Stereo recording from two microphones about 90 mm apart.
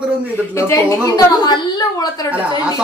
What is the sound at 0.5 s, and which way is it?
A woman's voice, 35° left (ahead or behind).